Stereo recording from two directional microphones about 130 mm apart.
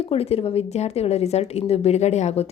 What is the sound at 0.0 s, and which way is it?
Speech, 50° left (ahead or behind).